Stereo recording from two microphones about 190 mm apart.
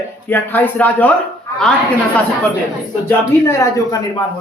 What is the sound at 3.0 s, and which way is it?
Speech, 15° left (ahead or behind).